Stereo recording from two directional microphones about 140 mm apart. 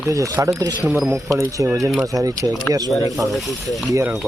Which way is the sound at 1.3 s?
25° right (ahead or behind).